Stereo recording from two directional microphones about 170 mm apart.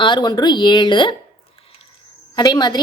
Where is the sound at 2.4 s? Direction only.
25° left (ahead or behind).